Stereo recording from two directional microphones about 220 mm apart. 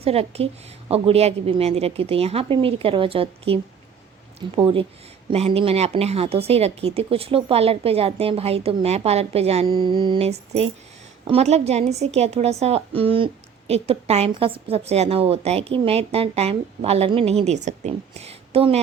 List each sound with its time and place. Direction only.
0.0 s a woman's voice: 25° right (ahead or behind)